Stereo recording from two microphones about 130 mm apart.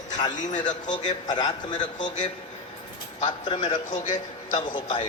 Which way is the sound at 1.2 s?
35° left (ahead or behind).